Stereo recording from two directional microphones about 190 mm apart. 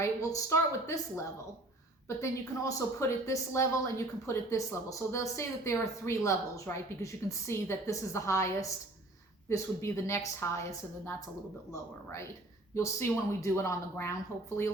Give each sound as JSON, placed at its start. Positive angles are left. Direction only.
{"t": 0.0, "sound": "a woman's voice", "side_deg": 15}
{"t": 11.7, "sound": "a woman's voice", "side_deg": 15}